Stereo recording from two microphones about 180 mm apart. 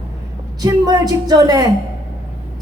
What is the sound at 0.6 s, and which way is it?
A woman's voice, 20° right (ahead or behind).